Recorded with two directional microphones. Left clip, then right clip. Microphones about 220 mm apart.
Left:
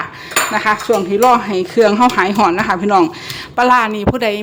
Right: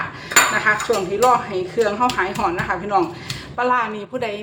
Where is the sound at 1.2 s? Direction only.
50° left (ahead or behind).